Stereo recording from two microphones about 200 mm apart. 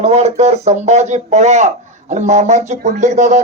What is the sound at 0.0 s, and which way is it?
Speech, 35° right (ahead or behind).